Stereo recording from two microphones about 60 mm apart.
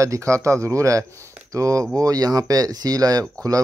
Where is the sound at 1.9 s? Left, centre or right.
Right.